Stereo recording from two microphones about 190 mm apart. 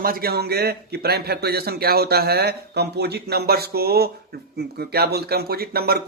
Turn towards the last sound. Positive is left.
turn(degrees=-55)  # may be behind; listen again after turning